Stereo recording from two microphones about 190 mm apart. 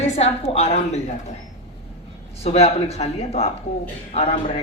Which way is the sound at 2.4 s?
35° left (ahead or behind).